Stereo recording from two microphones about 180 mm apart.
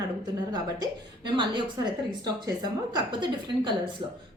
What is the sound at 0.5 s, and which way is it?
A woman's voice, 25° right (ahead or behind).